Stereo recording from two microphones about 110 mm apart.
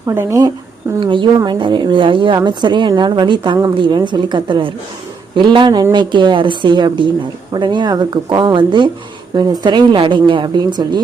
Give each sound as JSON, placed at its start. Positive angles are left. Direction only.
{"t": 0.0, "sound": "speech", "side_deg": -25}
{"t": 0.9, "sound": "a woman's voice", "side_deg": -45}